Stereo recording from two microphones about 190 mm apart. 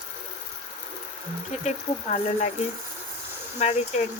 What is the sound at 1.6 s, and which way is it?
Speech, 35° left (ahead or behind).